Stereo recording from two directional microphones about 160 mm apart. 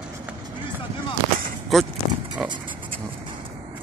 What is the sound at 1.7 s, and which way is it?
Speech, centre (ahead or behind).